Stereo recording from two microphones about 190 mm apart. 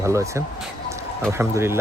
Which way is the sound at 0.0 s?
15° right (ahead or behind).